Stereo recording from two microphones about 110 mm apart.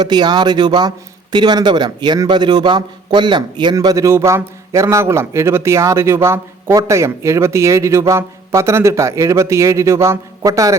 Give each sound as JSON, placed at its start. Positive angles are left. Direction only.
{"t": 0.0, "sound": "speech", "side_deg": -40}